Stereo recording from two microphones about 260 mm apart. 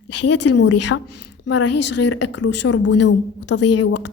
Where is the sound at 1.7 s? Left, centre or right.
Left.